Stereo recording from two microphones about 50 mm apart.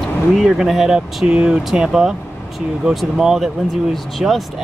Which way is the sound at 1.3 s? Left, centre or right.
Right.